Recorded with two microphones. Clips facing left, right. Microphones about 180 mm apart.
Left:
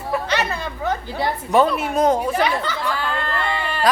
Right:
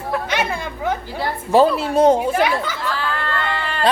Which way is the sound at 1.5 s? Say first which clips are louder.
Right 4 dB; 30° right (ahead or behind).